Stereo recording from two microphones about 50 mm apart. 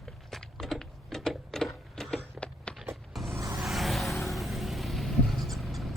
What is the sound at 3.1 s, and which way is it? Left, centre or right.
Vehicle, centre.